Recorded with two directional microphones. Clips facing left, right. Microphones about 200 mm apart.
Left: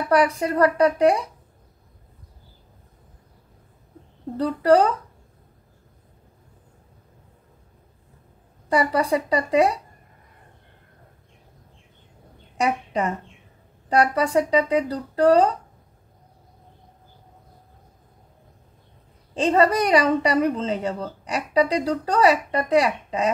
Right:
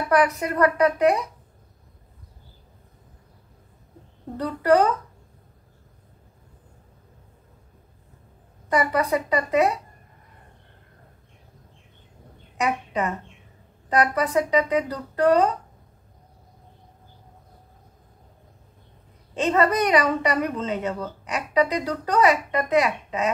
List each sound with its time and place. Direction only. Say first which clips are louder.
0.1 s speech: left 2 dB; 30° left (ahead or behind)
4.4 s speech: left 2 dB; 30° left (ahead or behind)
8.6 s speech: left 1 dB; 30° left (ahead or behind)
12.5 s a woman's voice: left 2 dB; 30° left (ahead or behind)
19.3 s speech: left 2 dB; 30° left (ahead or behind)